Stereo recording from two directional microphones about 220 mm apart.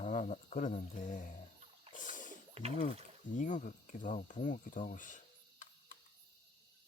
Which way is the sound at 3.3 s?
35° left (ahead or behind).